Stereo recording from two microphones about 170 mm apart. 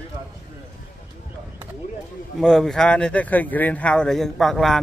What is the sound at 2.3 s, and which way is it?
Speech, centre (ahead or behind).